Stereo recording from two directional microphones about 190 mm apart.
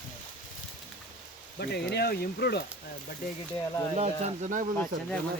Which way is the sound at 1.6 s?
60° left (ahead or behind).